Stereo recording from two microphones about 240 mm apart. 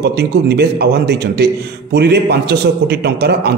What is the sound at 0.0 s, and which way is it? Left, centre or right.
A man's voice, right.